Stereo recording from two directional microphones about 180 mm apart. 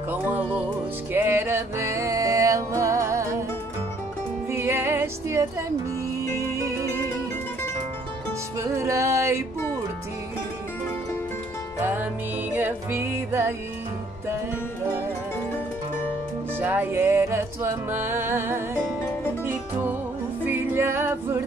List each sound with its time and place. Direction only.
0.1 s music: 10° right (ahead or behind)
4.5 s music: 15° right (ahead or behind)
6.5 s music: 15° right (ahead or behind)
8.5 s music: 15° right (ahead or behind)
11.8 s music: 10° right (ahead or behind)
16.5 s music: 10° right (ahead or behind)